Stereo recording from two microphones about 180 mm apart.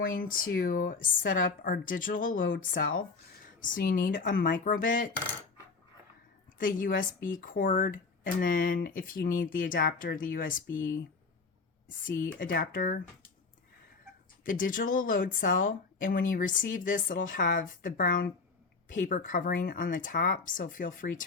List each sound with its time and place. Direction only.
0.0 s speech: 50° left (ahead or behind)
6.6 s speech: 50° left (ahead or behind)
12.0 s speech: 50° left (ahead or behind)
14.4 s speech: 50° left (ahead or behind)